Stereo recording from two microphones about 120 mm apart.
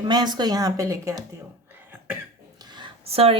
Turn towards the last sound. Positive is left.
turn(degrees=-55)  # may be behind; listen again after turning